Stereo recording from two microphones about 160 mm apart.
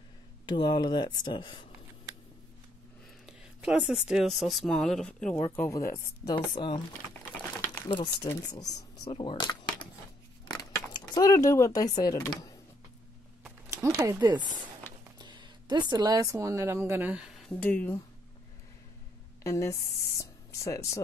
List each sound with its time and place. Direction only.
0.5 s speech: 30° left (ahead or behind)
3.3 s speech: 5° right (ahead or behind)
5.4 s speech: 15° left (ahead or behind)
7.9 s speech: 30° left (ahead or behind)
13.4 s speech: 15° right (ahead or behind)
14.8 s music: 15° left (ahead or behind)
15.1 s speech: 30° right (ahead or behind); by 17.4 s 5° right (ahead or behind)
17.5 s speech: 10° left (ahead or behind)
19.4 s speech: 20° left (ahead or behind)